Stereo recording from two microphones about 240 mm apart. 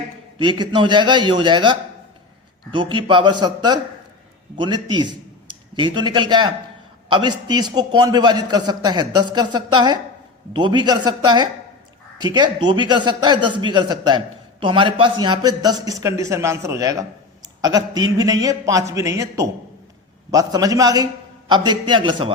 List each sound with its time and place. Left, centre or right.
0.3 s a man's voice: centre